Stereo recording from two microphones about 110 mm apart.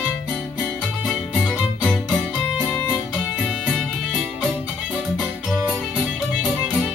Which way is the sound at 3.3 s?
5° right (ahead or behind).